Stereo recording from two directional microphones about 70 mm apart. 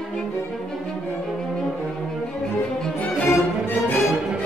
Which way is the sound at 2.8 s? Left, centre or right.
Centre.